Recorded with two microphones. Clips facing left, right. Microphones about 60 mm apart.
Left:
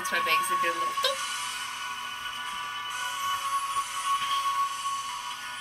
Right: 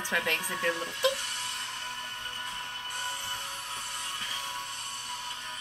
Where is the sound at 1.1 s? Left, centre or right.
Left.